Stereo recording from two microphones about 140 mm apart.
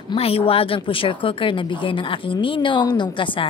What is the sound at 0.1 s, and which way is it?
A woman's voice, 45° left (ahead or behind).